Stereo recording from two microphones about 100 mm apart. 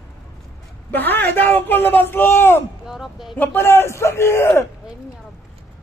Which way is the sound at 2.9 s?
Centre (ahead or behind).